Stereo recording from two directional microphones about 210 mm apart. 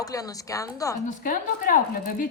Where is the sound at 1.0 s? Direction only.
40° left (ahead or behind).